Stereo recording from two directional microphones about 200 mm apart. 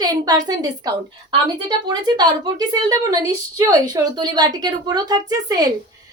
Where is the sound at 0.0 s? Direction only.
20° right (ahead or behind).